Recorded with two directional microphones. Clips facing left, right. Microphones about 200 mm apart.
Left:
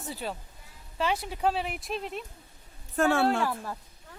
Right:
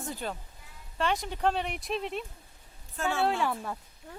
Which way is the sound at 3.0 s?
60° left (ahead or behind).